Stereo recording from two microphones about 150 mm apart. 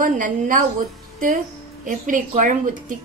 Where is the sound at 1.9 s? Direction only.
60° right (ahead or behind).